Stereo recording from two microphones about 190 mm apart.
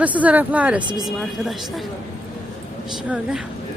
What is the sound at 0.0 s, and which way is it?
A woman's voice, 10° right (ahead or behind).